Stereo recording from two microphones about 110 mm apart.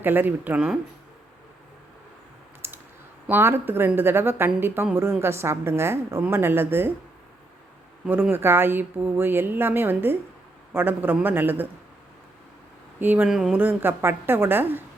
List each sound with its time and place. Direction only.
0.0 s a man's voice: 15° right (ahead or behind)
2.6 s clicking: 20° right (ahead or behind)
3.2 s speech: 20° right (ahead or behind)
8.0 s a man's voice: 15° right (ahead or behind)
13.0 s a man's voice: 15° right (ahead or behind)
13.2 s speech: 5° right (ahead or behind)
13.6 s speech: 20° right (ahead or behind)